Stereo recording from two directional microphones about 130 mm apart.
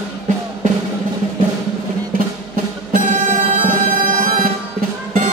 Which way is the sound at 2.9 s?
85° right.